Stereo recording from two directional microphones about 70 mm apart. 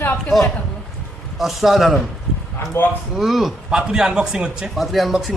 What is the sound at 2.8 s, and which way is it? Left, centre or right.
Speech, left.